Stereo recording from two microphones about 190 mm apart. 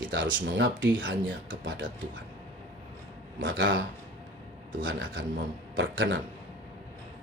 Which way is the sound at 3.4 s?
80° right.